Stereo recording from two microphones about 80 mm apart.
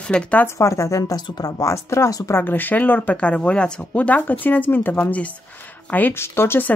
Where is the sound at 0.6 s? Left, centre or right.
Left.